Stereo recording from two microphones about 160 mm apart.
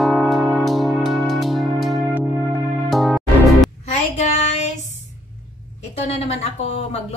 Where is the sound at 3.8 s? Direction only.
45° left (ahead or behind).